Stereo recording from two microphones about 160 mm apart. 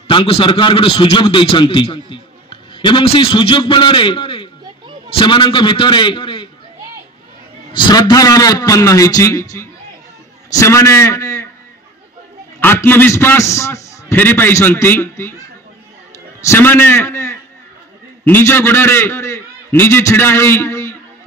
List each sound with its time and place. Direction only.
0.1 s a man's voice: 35° left (ahead or behind)
7.7 s a man's voice: 25° left (ahead or behind)
12.5 s a man's voice: 15° left (ahead or behind)
16.3 s a man's voice: 15° left (ahead or behind)